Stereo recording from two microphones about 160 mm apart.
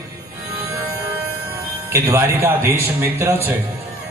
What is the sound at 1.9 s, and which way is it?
Speech, 15° right (ahead or behind).